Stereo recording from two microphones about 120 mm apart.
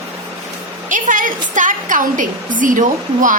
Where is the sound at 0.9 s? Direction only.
90° right.